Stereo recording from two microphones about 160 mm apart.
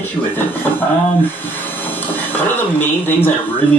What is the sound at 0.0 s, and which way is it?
Speech, 10° left (ahead or behind).